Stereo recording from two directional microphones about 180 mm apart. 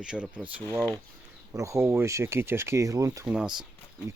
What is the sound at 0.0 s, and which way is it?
Speech, 5° right (ahead or behind).